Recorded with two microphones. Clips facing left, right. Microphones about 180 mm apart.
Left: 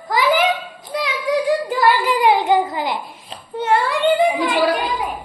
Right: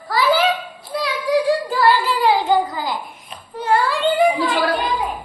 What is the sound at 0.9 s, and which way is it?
Child singing, 20° left (ahead or behind).